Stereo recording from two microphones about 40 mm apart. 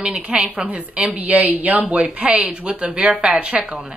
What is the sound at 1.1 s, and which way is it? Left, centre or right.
Speech, right.